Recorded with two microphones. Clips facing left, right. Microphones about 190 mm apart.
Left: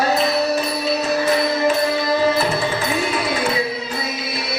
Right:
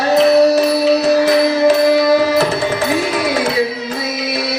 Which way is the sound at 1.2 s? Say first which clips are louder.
Right 6 dB; 80° right.